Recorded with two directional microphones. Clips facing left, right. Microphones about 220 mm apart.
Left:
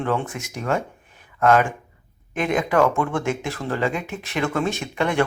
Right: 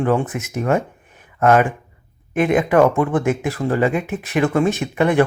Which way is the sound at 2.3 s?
50° right (ahead or behind).